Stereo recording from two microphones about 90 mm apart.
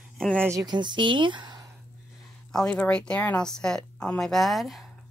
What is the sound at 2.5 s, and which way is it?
Speech, 10° left (ahead or behind).